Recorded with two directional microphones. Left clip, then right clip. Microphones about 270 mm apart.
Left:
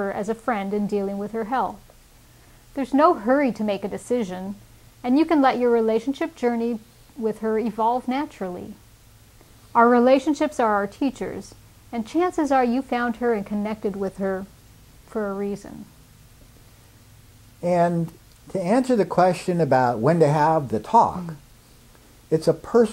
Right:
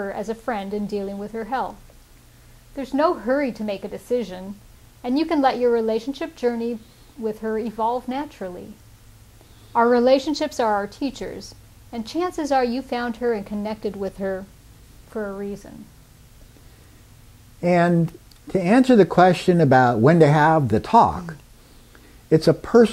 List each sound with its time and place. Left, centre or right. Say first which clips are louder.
0.0 s a woman's voice: left 2 dB; left
2.7 s speech: left 3 dB; left
9.7 s a woman's voice: even; left
15.0 s speech: left 2 dB; left
17.6 s speech: right 2 dB; right